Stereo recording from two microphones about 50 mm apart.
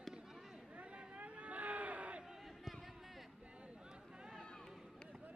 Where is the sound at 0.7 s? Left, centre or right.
Right.